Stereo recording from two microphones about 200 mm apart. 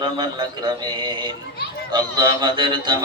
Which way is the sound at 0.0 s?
20° right (ahead or behind).